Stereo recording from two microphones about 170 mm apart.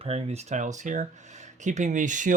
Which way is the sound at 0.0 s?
40° right (ahead or behind).